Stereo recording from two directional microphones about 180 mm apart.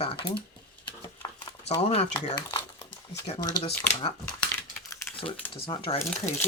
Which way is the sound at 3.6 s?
35° left (ahead or behind).